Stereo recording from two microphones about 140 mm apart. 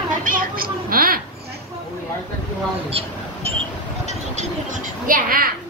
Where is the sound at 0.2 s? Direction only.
85° right.